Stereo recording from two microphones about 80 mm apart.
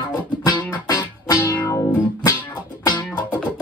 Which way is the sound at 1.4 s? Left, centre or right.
Left.